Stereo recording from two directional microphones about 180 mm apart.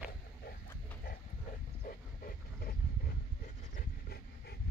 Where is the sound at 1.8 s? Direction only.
50° left (ahead or behind).